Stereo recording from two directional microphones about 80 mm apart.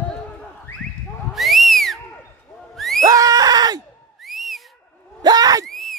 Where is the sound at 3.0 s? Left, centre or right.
Right.